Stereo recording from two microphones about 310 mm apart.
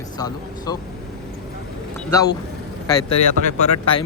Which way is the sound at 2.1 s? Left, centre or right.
Centre.